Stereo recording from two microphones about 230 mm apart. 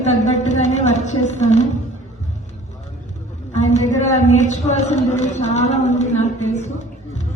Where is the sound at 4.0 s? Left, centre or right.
Left.